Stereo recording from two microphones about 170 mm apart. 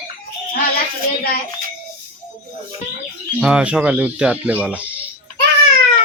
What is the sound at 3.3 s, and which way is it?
Speech, 5° right (ahead or behind).